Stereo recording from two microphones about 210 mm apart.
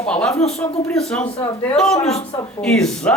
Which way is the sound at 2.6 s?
5° left (ahead or behind).